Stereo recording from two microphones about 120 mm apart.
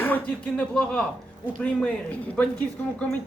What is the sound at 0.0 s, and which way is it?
A man's voice, 10° left (ahead or behind).